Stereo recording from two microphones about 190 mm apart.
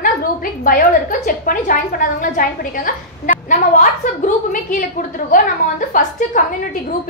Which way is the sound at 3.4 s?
40° left (ahead or behind).